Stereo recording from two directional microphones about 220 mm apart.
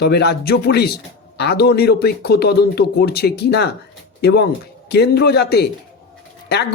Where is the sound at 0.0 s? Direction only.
50° left (ahead or behind).